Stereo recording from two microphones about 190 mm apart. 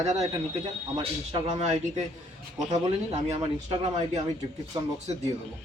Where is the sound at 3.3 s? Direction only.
30° right (ahead or behind).